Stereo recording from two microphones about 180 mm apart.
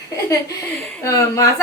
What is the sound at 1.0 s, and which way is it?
Speech, 15° left (ahead or behind).